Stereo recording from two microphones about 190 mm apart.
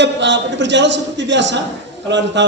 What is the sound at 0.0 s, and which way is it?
A man's voice, 70° right (ahead or behind).